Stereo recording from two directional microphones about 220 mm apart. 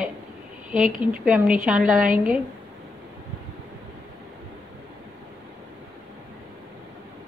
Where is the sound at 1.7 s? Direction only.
5° right (ahead or behind).